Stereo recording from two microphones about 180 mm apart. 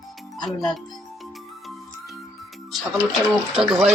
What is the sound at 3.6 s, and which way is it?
Speech, 5° right (ahead or behind).